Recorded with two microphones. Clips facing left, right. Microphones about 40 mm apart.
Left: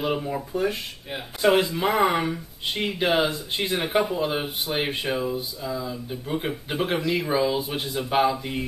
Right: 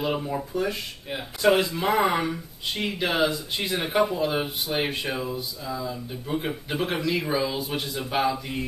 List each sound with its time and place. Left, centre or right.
0.0 s speech: centre
1.9 s speech: centre
2.1 s speech: centre
3.9 s speech: centre